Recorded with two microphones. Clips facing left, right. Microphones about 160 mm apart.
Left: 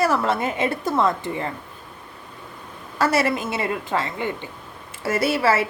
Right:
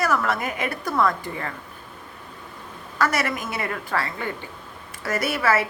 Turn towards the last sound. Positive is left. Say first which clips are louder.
# left 3 dB
turn(degrees=25)  # may be behind; listen again after turning